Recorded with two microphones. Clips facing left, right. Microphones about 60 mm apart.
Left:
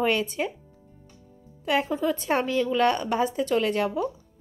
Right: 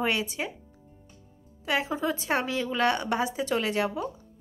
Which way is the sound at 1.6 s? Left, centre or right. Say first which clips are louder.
Left 3 dB; centre.